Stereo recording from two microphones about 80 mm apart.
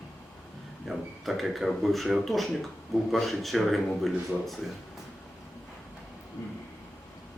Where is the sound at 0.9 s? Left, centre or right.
Centre.